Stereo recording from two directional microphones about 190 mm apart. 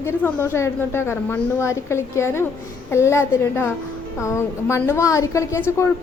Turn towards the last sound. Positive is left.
turn(degrees=15)  # may be behind; listen again after turning